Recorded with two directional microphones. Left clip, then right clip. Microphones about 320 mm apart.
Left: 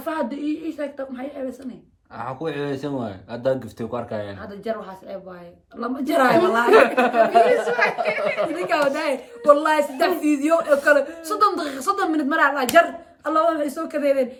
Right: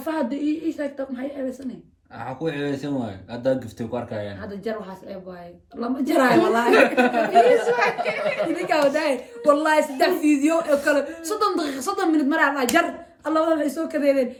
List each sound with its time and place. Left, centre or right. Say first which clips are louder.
0.0 s a woman's voice: right 1 dB; centre
2.1 s speech: left 1 dB; centre
5.8 s a woman's voice: left 1 dB; centre
6.7 s speech: left 4 dB; centre
7.4 s speech: right 1 dB; centre
8.5 s a woman's voice: right 1 dB; centre